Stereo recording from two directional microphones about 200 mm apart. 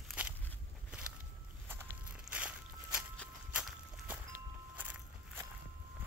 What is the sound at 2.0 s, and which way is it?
Walk, 5° right (ahead or behind).